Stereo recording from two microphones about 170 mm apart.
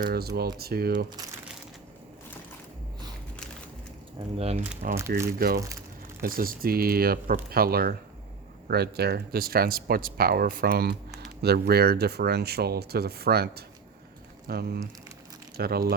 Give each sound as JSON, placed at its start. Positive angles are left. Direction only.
{"t": 0.0, "sound": "speech", "side_deg": -65}
{"t": 4.4, "sound": "speech", "side_deg": -40}
{"t": 4.9, "sound": "speech", "side_deg": -15}
{"t": 6.2, "sound": "speech", "side_deg": -55}